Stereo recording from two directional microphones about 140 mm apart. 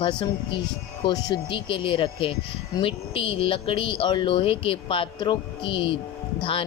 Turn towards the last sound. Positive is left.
turn(degrees=40)  # may be behind; listen again after turning